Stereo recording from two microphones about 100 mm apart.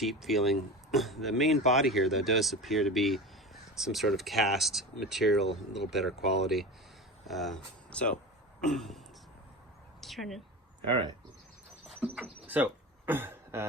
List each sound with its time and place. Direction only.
0.0 s speech: centre (ahead or behind)
10.0 s speech: centre (ahead or behind)
12.5 s a sound: 20° right (ahead or behind)